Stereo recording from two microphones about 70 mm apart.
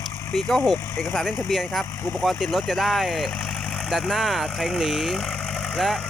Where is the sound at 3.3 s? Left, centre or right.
Centre.